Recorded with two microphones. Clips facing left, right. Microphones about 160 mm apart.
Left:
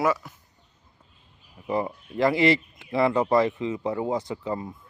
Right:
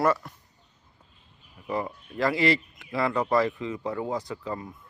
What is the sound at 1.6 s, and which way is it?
Speech, 25° left (ahead or behind).